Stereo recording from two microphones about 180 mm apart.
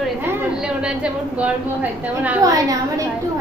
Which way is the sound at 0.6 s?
5° right (ahead or behind).